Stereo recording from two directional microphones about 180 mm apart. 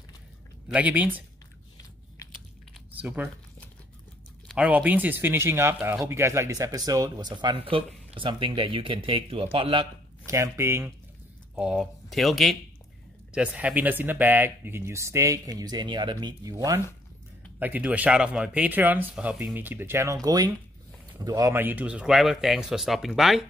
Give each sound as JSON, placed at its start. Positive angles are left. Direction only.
{"t": 0.7, "sound": "speech", "side_deg": -10}
{"t": 3.0, "sound": "speech", "side_deg": -5}
{"t": 4.5, "sound": "speech", "side_deg": -5}